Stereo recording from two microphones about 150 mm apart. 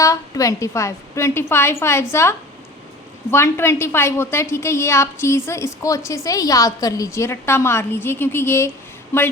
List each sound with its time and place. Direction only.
0.0 s a woman's voice: 20° left (ahead or behind)
3.3 s a woman's voice: 15° left (ahead or behind)